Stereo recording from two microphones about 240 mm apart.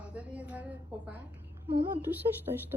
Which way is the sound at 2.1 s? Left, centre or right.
Centre.